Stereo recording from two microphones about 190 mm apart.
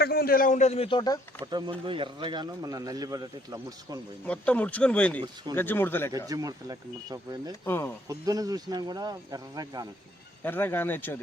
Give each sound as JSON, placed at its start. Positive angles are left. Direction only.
{"t": 0.0, "sound": "a man's voice", "side_deg": 55}
{"t": 1.5, "sound": "a man's voice", "side_deg": -25}
{"t": 4.3, "sound": "speech", "side_deg": 5}
{"t": 6.1, "sound": "a man's voice", "side_deg": -20}
{"t": 7.6, "sound": "speech", "side_deg": 10}
{"t": 8.0, "sound": "a man's voice", "side_deg": -20}
{"t": 10.4, "sound": "speech", "side_deg": 10}